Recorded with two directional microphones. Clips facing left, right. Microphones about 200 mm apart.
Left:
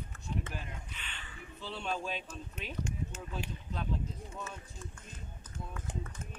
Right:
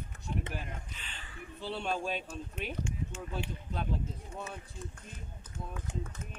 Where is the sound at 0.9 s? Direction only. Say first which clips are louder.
Even; 35° right (ahead or behind).